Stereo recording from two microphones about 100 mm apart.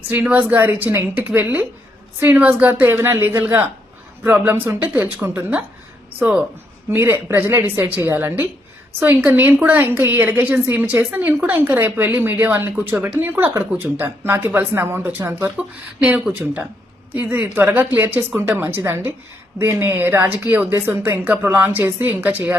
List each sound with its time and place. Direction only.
0.1 s a woman's voice: 20° right (ahead or behind)
6.9 s a woman's voice: 25° right (ahead or behind)
15.5 s a woman's voice: 10° right (ahead or behind)